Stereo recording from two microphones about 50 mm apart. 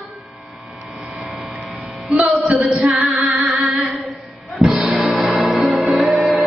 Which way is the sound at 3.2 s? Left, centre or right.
Right.